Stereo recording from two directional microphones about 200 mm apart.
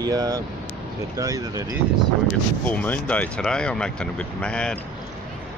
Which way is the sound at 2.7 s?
5° left (ahead or behind).